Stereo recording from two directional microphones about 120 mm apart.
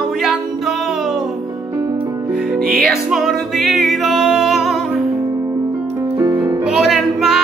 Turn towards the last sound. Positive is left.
turn(degrees=-5)  # may be behind; listen again after turning